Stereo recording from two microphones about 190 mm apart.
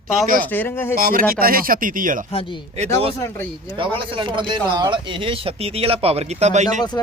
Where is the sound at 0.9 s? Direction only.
50° right (ahead or behind).